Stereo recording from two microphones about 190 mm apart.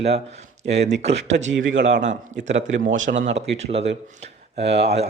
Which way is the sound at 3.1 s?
70° right (ahead or behind).